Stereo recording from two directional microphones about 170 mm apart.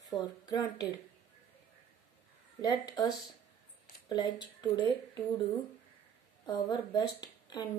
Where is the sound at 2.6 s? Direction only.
25° left (ahead or behind).